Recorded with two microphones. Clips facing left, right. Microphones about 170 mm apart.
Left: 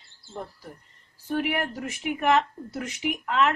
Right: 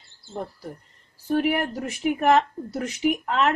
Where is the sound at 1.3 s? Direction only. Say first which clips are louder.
Right 4 dB; 35° right (ahead or behind).